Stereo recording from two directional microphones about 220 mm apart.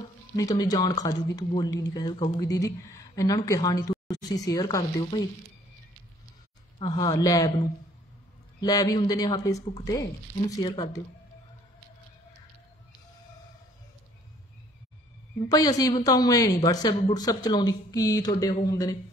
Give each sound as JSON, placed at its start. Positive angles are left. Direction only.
{"t": 0.4, "sound": "speech", "side_deg": 15}
{"t": 6.8, "sound": "speech", "side_deg": 20}
{"t": 15.4, "sound": "speech", "side_deg": 15}